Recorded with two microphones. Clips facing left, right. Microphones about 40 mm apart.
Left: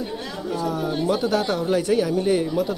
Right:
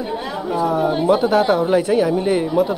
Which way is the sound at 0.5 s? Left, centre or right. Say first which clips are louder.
Right 7 dB; right.